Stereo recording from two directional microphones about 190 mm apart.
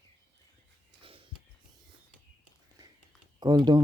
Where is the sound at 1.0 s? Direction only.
30° right (ahead or behind).